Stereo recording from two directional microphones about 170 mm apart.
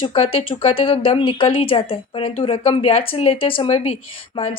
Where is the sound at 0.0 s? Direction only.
35° left (ahead or behind).